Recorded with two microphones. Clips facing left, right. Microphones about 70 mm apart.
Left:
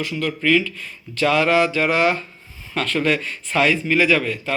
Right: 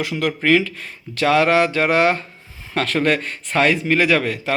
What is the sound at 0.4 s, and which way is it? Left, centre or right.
Speech, right.